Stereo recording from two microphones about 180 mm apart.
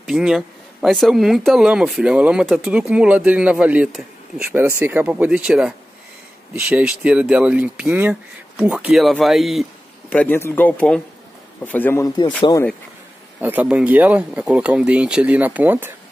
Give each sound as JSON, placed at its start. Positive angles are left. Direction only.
{"t": 0.0, "sound": "a man's voice", "side_deg": -5}
{"t": 10.0, "sound": "speech", "side_deg": 10}
{"t": 13.4, "sound": "speech", "side_deg": -10}